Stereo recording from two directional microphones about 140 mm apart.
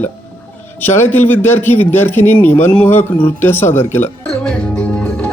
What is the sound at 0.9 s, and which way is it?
Speech, 15° left (ahead or behind).